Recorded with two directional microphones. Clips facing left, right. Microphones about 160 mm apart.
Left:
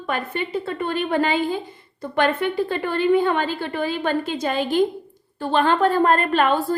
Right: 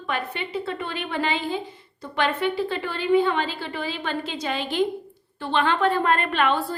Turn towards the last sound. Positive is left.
turn(degrees=45)  # may be behind; listen again after turning